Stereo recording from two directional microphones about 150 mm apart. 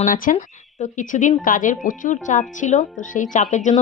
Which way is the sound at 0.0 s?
60° left (ahead or behind).